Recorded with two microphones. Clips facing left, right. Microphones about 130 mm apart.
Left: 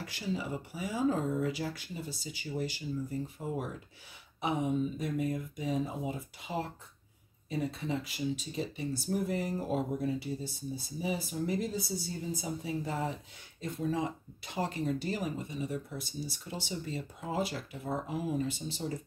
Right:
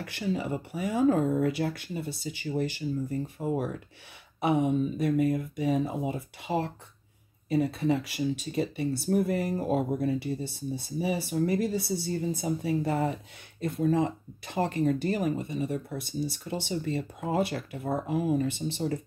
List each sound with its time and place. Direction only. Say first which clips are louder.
0.0 s speech: right 5 dB; 60° right (ahead or behind)